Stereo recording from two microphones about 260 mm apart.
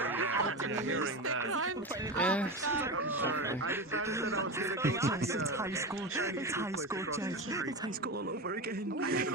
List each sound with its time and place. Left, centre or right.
0.2 s music: right
2.1 s speech: centre
2.7 s speech: centre